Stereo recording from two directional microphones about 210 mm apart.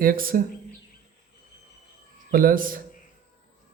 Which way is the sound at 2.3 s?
40° right (ahead or behind).